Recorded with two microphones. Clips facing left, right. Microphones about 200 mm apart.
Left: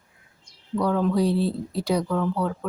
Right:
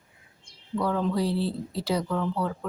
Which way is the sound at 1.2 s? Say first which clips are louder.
Left 4 dB; 15° left (ahead or behind).